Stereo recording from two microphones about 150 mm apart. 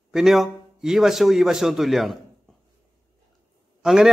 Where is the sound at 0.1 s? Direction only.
Centre (ahead or behind).